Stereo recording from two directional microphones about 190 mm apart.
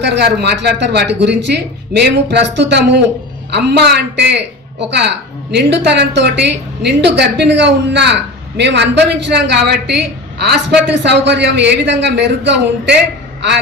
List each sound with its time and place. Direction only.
0.0 s a woman's voice: 60° right (ahead or behind)